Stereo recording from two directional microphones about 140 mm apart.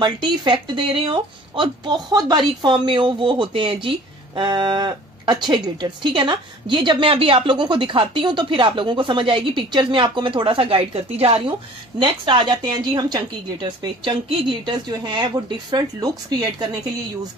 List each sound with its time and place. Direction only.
0.0 s speech: 35° right (ahead or behind)